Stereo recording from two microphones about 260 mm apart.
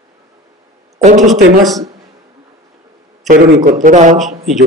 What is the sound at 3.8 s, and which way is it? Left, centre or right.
Speech, right.